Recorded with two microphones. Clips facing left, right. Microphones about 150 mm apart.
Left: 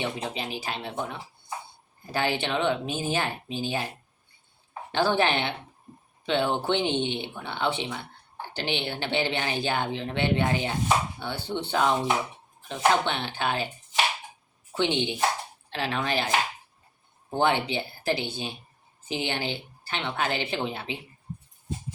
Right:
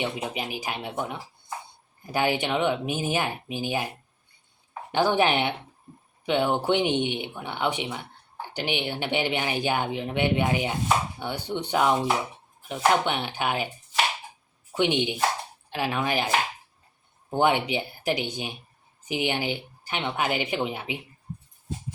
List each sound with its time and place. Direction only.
0.0 s speech: 15° right (ahead or behind)
14.8 s speech: 15° right (ahead or behind)
17.3 s speech: 15° right (ahead or behind)